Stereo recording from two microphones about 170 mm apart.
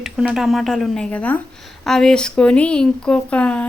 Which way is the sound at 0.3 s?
Centre (ahead or behind).